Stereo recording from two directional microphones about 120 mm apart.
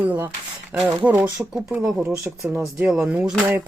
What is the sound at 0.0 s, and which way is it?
Speech, 15° right (ahead or behind).